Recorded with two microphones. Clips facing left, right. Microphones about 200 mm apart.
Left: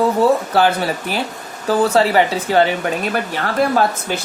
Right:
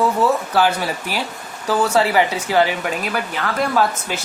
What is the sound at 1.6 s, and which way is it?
Speech, 30° left (ahead or behind).